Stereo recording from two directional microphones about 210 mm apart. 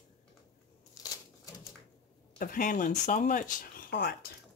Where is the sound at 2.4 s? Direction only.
40° left (ahead or behind).